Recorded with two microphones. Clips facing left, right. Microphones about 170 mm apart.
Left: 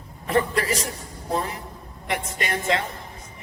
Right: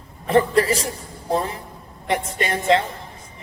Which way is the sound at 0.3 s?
30° right (ahead or behind).